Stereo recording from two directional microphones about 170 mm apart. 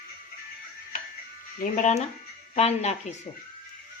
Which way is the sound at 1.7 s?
45° left (ahead or behind).